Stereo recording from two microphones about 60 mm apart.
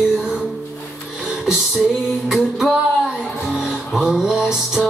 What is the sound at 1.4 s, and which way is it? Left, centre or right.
Music, centre.